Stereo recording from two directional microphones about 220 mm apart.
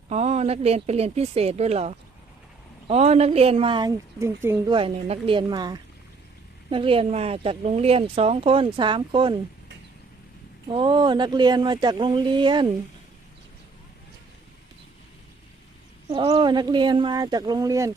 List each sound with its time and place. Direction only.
0.1 s speech: 30° right (ahead or behind); by 4.7 s 10° right (ahead or behind)
4.7 s speech: 25° right (ahead or behind)
10.7 s speech: 20° right (ahead or behind)
16.0 s speech: 20° right (ahead or behind)